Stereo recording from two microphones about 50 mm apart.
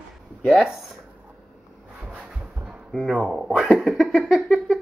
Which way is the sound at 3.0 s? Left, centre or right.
Centre.